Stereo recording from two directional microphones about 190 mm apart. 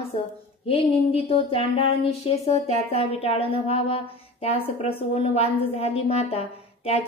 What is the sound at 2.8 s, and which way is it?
A woman's voice, 30° left (ahead or behind).